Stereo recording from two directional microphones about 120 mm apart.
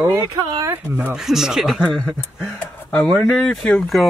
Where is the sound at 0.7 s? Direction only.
20° right (ahead or behind).